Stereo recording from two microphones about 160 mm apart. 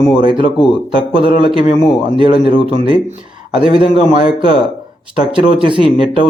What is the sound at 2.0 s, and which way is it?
Speech, 30° right (ahead or behind).